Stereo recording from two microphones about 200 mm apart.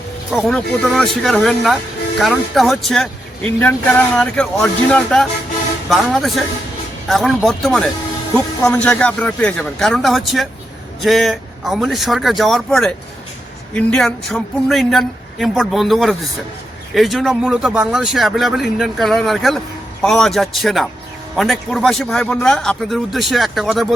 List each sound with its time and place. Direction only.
0.3 s speech: centre (ahead or behind)